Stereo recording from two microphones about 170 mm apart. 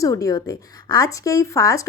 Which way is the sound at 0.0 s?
20° left (ahead or behind).